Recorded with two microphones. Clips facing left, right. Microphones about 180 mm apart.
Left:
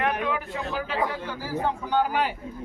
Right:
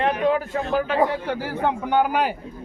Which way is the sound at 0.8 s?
55° right (ahead or behind).